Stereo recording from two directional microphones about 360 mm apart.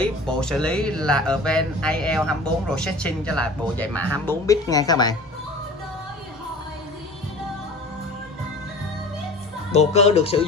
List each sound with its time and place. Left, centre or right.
0.0 s speech: centre
9.7 s speech: centre